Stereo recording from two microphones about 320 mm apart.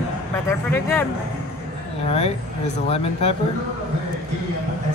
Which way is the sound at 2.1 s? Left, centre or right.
Centre.